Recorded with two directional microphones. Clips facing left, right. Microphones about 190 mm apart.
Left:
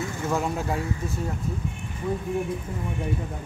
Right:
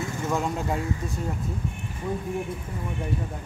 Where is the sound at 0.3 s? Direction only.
5° left (ahead or behind).